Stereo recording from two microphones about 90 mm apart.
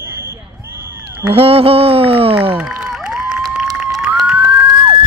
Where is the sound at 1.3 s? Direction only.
90° right.